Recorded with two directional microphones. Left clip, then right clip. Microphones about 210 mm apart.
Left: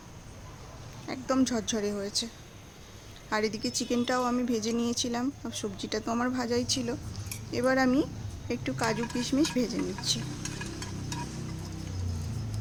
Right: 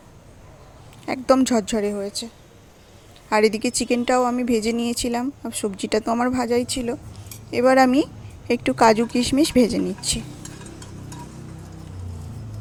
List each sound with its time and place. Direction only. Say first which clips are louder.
1.0 s speech: right 11 dB; 35° right (ahead or behind)
3.2 s a woman's voice: right 11 dB; 30° right (ahead or behind)